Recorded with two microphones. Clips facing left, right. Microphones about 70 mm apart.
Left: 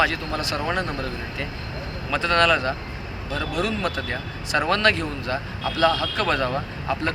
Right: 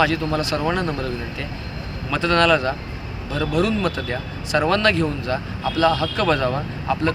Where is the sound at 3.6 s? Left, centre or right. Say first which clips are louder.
Right 5 dB; right.